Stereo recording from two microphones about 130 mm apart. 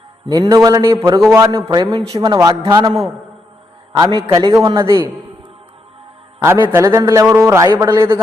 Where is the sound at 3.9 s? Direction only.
30° right (ahead or behind).